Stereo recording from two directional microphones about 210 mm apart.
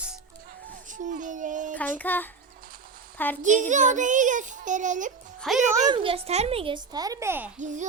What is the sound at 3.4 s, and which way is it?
A child's voice, 35° right (ahead or behind).